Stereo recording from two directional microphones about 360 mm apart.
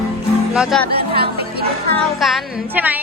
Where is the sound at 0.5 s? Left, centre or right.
Centre.